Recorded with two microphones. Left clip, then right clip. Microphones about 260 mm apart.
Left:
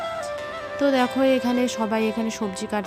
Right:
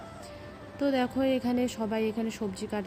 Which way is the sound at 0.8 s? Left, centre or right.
Left.